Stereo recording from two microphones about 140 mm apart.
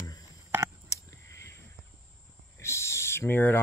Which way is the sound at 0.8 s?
20° left (ahead or behind).